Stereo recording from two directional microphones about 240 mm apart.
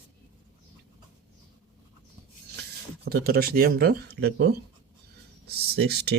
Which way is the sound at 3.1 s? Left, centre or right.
Right.